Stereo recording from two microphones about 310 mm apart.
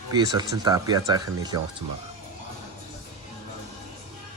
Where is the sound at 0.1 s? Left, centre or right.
Centre.